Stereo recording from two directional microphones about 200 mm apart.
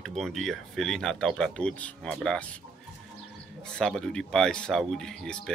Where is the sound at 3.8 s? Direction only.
5° left (ahead or behind).